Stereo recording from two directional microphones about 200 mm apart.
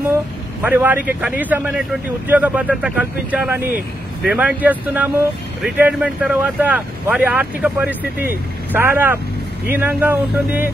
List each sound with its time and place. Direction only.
0.6 s speech: 10° right (ahead or behind)